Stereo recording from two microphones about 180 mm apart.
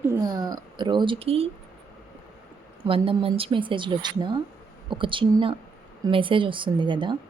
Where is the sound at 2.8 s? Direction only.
30° right (ahead or behind).